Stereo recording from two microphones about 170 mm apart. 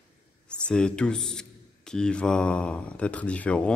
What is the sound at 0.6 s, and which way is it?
Speech, 5° left (ahead or behind).